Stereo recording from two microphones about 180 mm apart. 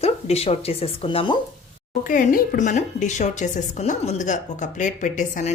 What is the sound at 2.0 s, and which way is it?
A woman's voice, 50° left (ahead or behind).